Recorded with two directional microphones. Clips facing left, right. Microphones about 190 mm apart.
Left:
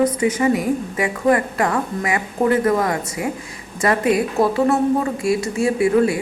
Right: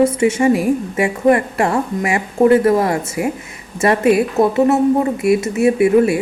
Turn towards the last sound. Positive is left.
turn(degrees=-25)  # may be behind; listen again after turning